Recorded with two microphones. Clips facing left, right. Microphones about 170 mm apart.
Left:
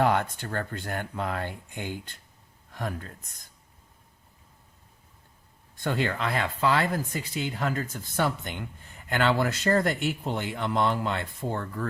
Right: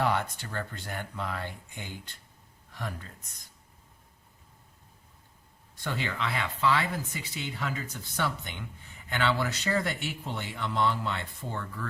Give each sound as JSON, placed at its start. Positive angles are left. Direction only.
{"t": 0.0, "sound": "speech", "side_deg": 50}
{"t": 5.8, "sound": "speech", "side_deg": 50}